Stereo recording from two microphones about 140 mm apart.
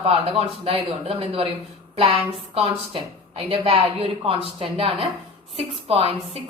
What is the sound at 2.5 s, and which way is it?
A woman's voice, 40° right (ahead or behind).